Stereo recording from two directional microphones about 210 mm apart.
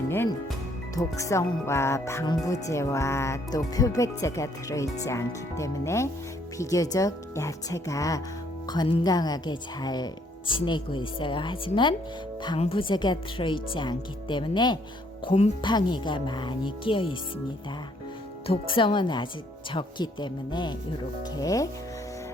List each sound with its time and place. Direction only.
0.1 s speech: 10° left (ahead or behind)
18.4 s speech: 25° left (ahead or behind)